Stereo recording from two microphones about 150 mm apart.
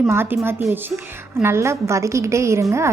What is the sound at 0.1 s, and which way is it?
A woman's voice, 15° right (ahead or behind).